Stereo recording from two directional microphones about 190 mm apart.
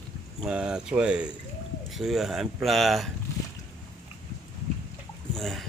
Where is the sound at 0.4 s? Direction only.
5° right (ahead or behind).